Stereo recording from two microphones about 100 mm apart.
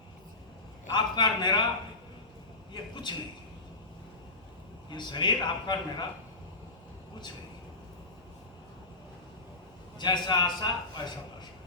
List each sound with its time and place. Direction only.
0.9 s a man's voice: 50° left (ahead or behind)
2.9 s a man's voice: 50° left (ahead or behind)
4.9 s a man's voice: 50° left (ahead or behind)
10.0 s a man's voice: 50° left (ahead or behind)